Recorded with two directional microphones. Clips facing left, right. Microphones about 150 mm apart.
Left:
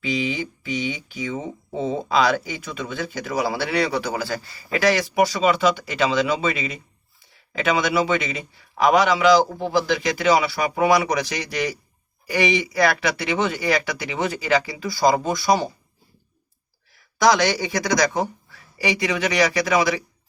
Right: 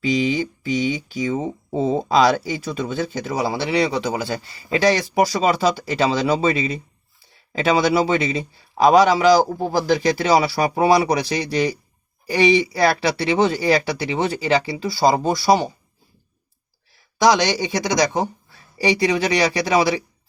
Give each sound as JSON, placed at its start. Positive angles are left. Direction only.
{"t": 0.0, "sound": "speech", "side_deg": -35}
{"t": 16.9, "sound": "speech", "side_deg": -25}